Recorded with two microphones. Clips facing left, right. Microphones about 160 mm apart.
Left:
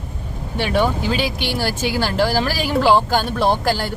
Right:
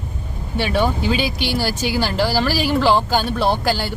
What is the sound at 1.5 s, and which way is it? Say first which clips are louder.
Speech: even; 10° right (ahead or behind).